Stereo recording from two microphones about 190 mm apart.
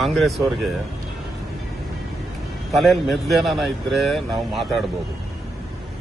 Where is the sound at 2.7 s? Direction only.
Centre (ahead or behind).